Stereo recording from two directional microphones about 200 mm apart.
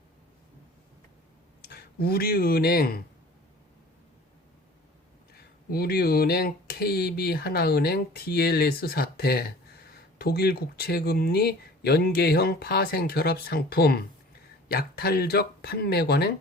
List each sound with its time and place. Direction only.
1.7 s speech: 50° left (ahead or behind)
5.3 s speech: 50° left (ahead or behind)